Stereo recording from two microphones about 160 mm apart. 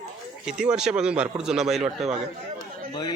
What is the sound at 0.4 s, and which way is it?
A man's voice, 5° right (ahead or behind).